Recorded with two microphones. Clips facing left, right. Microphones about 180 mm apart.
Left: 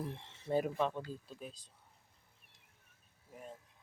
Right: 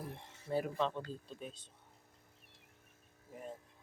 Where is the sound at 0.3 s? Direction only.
20° left (ahead or behind).